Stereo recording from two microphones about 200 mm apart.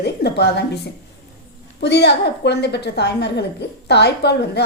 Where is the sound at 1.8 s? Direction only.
60° left (ahead or behind).